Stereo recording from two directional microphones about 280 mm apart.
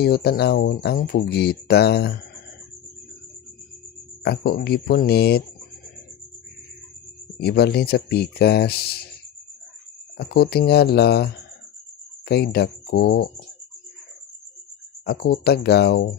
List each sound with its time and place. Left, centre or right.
0.0 s speech: left
4.2 s speech: left
7.3 s speech: left
10.1 s speech: left
15.0 s speech: left